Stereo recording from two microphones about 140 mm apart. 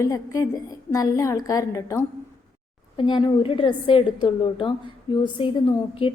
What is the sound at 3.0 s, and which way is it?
A woman's voice, 40° left (ahead or behind).